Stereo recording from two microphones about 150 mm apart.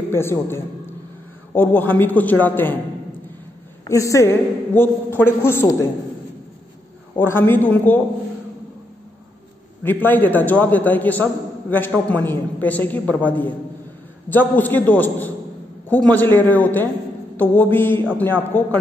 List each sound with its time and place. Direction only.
0.1 s a man's voice: 15° left (ahead or behind)
3.9 s a man's voice: 20° left (ahead or behind)
7.2 s a man's voice: 15° left (ahead or behind)
9.8 s a man's voice: 15° left (ahead or behind)